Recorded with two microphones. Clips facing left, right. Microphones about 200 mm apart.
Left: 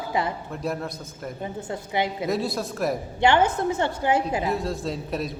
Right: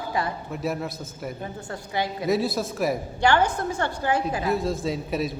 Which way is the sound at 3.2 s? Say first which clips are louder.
Left 2 dB; 20° left (ahead or behind).